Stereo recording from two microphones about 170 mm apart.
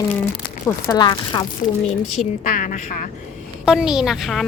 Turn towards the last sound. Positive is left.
turn(degrees=0)  # may be behind; listen again after turning